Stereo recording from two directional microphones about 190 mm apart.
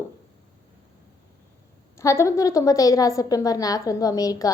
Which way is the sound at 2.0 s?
15° left (ahead or behind).